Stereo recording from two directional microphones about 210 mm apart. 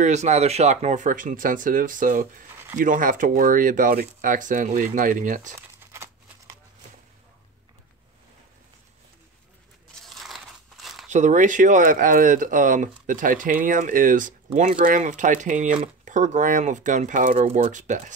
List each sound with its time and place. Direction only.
0.0 s speech: 35° right (ahead or behind)
5.8 s a sound: 10° right (ahead or behind)
10.0 s crumpling: centre (ahead or behind)
11.1 s speech: 35° right (ahead or behind)